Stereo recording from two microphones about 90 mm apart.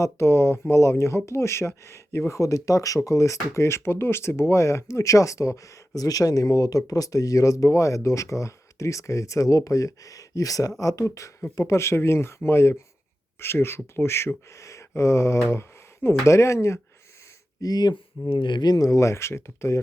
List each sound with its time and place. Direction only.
0.0 s speech: 30° left (ahead or behind)
17.6 s speech: 45° left (ahead or behind)
18.3 s speech: 65° left (ahead or behind); by 19.8 s 30° left (ahead or behind)